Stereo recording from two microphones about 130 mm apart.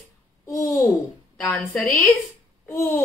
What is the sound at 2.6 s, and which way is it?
Babbling, 20° left (ahead or behind).